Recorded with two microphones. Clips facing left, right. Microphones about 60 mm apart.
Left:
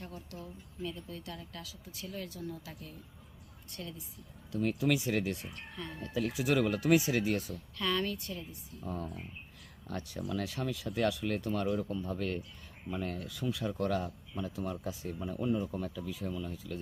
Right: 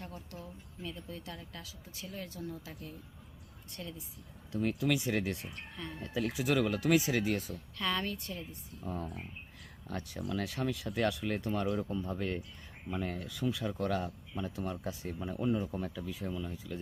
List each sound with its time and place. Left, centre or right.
0.9 s speech: right
4.5 s speech: centre
5.5 s speech: centre
6.3 s speech: centre
7.8 s speech: right
8.8 s speech: centre
13.2 s speech: centre